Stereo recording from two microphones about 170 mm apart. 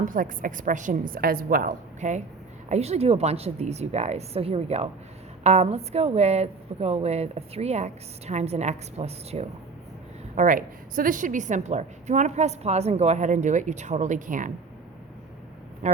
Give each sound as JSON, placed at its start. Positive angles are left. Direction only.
{"t": 0.0, "sound": "a woman's voice", "side_deg": -50}
{"t": 10.3, "sound": "a woman's voice", "side_deg": -50}
{"t": 15.8, "sound": "speech", "side_deg": -45}